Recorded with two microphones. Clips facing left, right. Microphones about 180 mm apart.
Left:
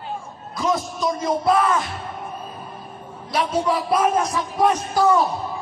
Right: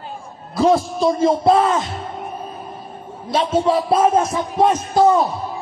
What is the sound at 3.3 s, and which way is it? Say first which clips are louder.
Speech: right 4 dB; 25° right (ahead or behind).